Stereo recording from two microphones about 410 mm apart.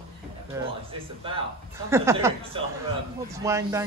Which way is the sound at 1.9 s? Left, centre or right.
Centre.